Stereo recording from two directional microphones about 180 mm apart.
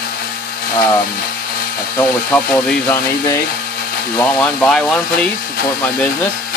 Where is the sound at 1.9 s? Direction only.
10° left (ahead or behind).